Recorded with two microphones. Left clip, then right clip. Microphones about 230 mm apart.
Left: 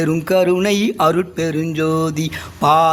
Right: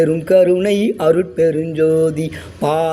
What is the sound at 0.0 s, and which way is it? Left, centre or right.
Mantra, left.